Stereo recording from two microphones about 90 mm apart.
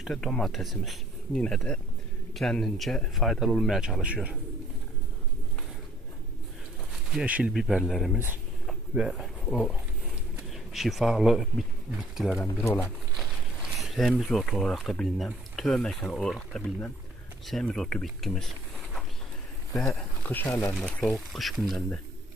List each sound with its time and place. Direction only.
0.1 s speech: 5° left (ahead or behind); by 4.4 s 15° right (ahead or behind)
7.1 s speech: 5° right (ahead or behind)
8.6 s a sound: 5° right (ahead or behind)
9.1 s speech: 5° left (ahead or behind)
12.6 s speech: 35° left (ahead or behind)
13.1 s a sound: centre (ahead or behind)
14.1 s speech: 10° left (ahead or behind)
20.2 s speech: 20° left (ahead or behind)
20.7 s speech: 5° left (ahead or behind)